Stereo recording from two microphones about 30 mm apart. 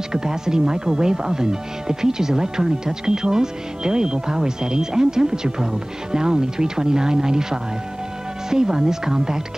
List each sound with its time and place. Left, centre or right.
0.1 s speech: right
8.5 s speech: centre